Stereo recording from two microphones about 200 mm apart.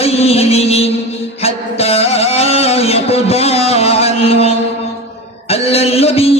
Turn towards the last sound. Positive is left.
turn(degrees=30)  # may be behind; listen again after turning